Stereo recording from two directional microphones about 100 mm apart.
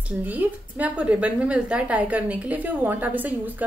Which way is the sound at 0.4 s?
15° right (ahead or behind).